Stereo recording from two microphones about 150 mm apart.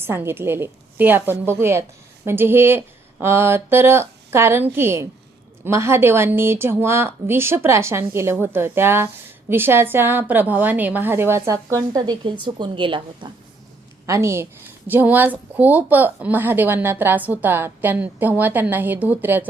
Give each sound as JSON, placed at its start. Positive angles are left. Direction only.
{"t": 0.0, "sound": "a woman's voice", "side_deg": -15}
{"t": 14.1, "sound": "a woman's voice", "side_deg": -20}